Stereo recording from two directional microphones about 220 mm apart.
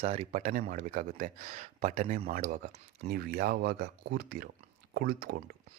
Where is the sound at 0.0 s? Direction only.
30° right (ahead or behind).